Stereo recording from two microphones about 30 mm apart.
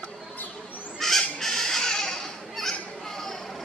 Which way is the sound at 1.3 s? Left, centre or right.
Centre.